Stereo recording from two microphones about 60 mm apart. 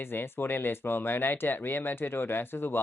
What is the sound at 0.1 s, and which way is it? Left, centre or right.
Speech, left.